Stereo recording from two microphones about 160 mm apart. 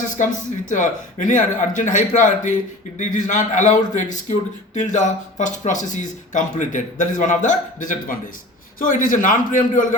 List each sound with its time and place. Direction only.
0.2 s a man's voice: 55° left (ahead or behind)